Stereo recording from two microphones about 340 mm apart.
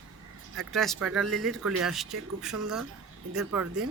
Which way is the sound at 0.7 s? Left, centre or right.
Centre.